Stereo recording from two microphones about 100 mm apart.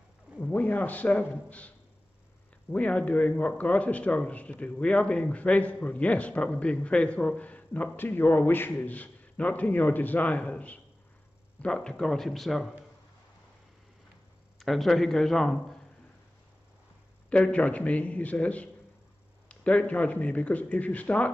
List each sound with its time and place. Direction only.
0.4 s a man's voice: 15° left (ahead or behind)
2.7 s a man's voice: 10° left (ahead or behind)
14.6 s a man's voice: centre (ahead or behind)
17.3 s a man's voice: 15° left (ahead or behind)